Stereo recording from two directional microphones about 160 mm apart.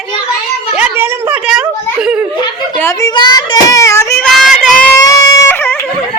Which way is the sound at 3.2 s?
25° left (ahead or behind).